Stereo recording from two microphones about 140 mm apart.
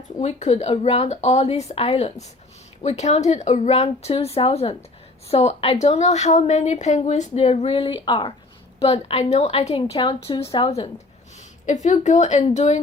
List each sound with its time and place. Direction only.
0.2 s a woman's voice: 55° left (ahead or behind); by 8.3 s 35° left (ahead or behind)
8.8 s a woman's voice: 45° left (ahead or behind)
9.8 s a woman's voice: 35° left (ahead or behind)
11.6 s speech: 60° left (ahead or behind)